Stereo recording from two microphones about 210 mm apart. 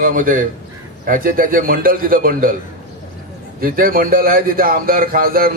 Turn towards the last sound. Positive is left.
turn(degrees=-45)  # may be behind; listen again after turning